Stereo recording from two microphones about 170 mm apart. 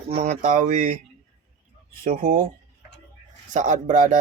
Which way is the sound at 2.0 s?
55° right (ahead or behind).